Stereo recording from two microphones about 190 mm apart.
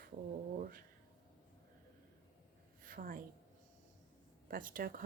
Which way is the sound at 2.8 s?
45° right (ahead or behind).